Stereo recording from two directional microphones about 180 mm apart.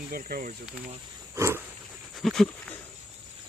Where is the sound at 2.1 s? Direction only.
Centre (ahead or behind).